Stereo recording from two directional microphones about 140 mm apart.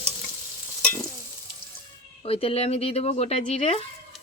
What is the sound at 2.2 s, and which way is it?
Speech, 45° left (ahead or behind).